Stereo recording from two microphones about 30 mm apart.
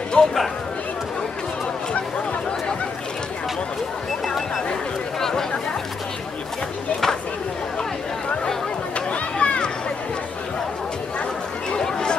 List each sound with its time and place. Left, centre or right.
0.2 s speech: left
8.9 s chatter: left
11.7 s a sound: left